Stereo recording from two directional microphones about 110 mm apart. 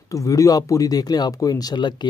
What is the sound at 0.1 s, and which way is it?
Speech, 30° left (ahead or behind).